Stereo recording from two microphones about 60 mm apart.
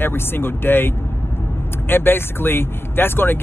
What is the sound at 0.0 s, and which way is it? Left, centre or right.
Speech, left.